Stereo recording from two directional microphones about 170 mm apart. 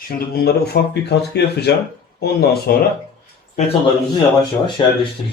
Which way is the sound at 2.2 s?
70° left (ahead or behind).